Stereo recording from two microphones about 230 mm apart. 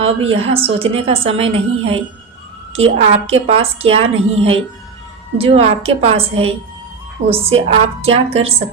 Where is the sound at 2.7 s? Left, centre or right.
Right.